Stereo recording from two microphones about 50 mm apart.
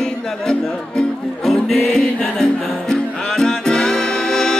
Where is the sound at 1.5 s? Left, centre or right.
Centre.